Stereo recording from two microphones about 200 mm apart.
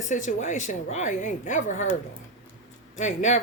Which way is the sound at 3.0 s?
35° left (ahead or behind).